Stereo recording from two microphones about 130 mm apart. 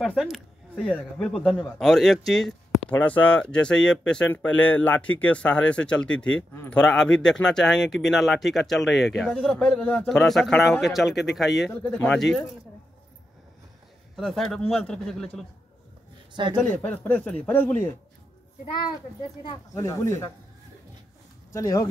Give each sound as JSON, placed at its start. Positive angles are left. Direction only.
{"t": 0.0, "sound": "speech", "side_deg": 0}
{"t": 11.7, "sound": "speech", "side_deg": 10}
{"t": 14.1, "sound": "speech", "side_deg": 0}
{"t": 16.4, "sound": "speech", "side_deg": -40}
{"t": 16.8, "sound": "speech", "side_deg": 10}
{"t": 19.7, "sound": "speech", "side_deg": 20}
{"t": 21.5, "sound": "speech", "side_deg": 25}